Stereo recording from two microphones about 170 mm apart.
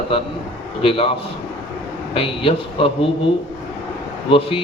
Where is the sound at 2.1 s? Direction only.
35° left (ahead or behind).